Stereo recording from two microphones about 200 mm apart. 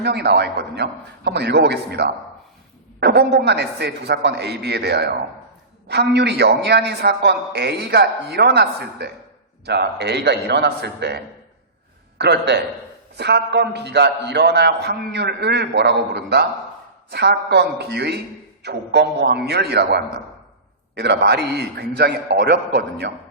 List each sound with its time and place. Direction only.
0.0 s a man's voice: 55° right (ahead or behind)